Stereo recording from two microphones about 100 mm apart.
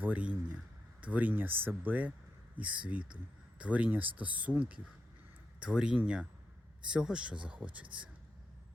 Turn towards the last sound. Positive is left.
turn(degrees=-15)  # may be behind; listen again after turning